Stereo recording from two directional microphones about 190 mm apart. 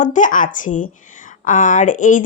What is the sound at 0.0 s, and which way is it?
Speech, 40° left (ahead or behind).